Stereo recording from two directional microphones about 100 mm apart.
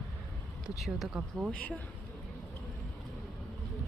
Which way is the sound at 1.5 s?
15° left (ahead or behind).